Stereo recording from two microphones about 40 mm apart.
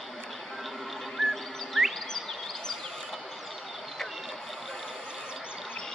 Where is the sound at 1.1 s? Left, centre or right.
Centre.